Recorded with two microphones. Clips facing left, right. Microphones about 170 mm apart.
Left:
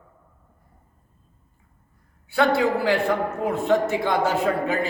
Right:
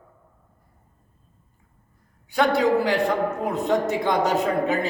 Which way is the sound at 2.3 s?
15° right (ahead or behind).